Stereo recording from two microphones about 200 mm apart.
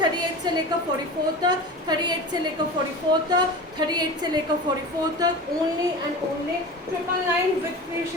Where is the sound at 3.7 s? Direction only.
20° right (ahead or behind).